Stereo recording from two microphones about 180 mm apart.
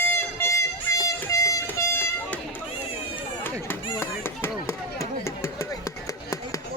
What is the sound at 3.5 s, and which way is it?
Chop, 10° left (ahead or behind).